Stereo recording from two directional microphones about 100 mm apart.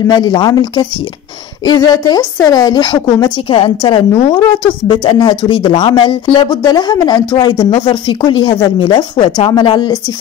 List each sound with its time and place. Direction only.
0.1 s a woman's voice: 45° left (ahead or behind)
3.4 s speech: 50° left (ahead or behind)
8.7 s speech: 60° left (ahead or behind)
9.5 s speech: 45° left (ahead or behind)